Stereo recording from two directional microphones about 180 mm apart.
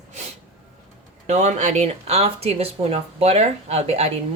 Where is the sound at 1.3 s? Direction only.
40° right (ahead or behind).